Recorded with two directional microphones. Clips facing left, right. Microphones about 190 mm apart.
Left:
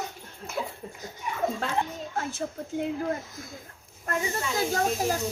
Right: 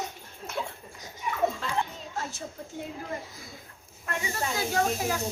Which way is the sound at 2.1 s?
55° left (ahead or behind).